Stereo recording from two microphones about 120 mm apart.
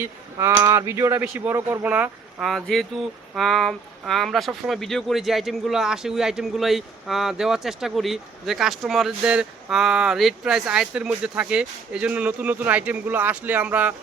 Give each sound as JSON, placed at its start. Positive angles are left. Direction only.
{"t": 0.0, "sound": "speech", "side_deg": -25}
{"t": 2.4, "sound": "speech", "side_deg": 0}